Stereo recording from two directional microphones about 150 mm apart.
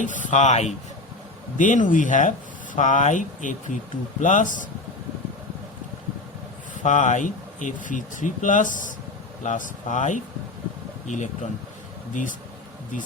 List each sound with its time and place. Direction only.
0.2 s speech: 55° left (ahead or behind)
1.5 s speech: 60° left (ahead or behind)
6.8 s speech: 55° left (ahead or behind)